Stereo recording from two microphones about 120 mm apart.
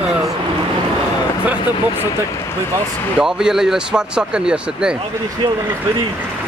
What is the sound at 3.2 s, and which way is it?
Speech, 5° right (ahead or behind).